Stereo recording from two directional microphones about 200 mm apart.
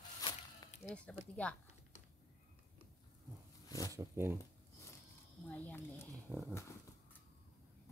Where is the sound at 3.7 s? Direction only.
15° left (ahead or behind).